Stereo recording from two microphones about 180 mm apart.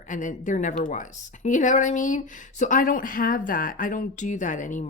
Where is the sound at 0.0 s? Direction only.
45° left (ahead or behind).